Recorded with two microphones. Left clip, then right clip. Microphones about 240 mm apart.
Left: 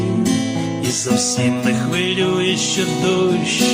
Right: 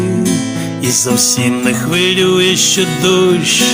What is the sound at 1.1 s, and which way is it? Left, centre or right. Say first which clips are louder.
Music: right 5 dB; right.